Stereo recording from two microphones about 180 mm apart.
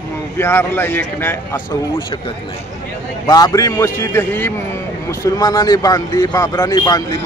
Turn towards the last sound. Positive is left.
turn(degrees=20)  # may be behind; listen again after turning